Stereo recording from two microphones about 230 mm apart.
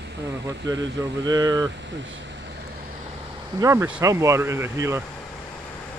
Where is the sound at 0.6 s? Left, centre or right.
Centre.